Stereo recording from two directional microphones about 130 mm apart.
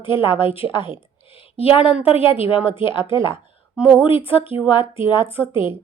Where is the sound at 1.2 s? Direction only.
45° left (ahead or behind).